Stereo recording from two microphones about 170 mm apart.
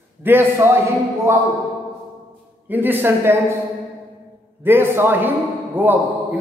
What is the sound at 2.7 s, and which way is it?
Speech, 10° right (ahead or behind).